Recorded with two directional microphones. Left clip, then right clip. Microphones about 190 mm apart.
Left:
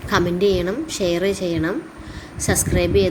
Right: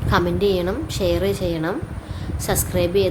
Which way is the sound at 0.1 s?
Centre (ahead or behind).